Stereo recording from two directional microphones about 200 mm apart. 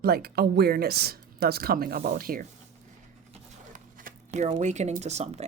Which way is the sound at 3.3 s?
40° right (ahead or behind).